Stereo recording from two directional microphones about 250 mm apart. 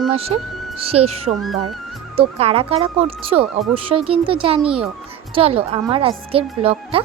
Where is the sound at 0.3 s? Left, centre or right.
Right.